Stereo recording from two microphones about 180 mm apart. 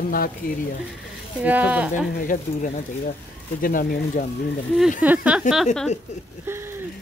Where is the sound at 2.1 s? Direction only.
50° left (ahead or behind).